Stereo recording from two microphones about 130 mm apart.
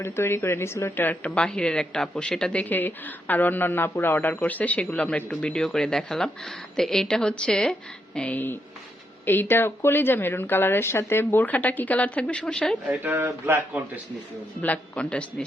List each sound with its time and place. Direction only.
0.0 s a woman's voice: 20° left (ahead or behind)
12.9 s speech: 15° right (ahead or behind)
14.6 s a woman's voice: 10° left (ahead or behind)